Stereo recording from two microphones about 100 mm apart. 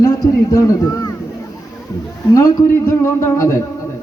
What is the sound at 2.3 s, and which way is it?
A man's voice, 30° left (ahead or behind).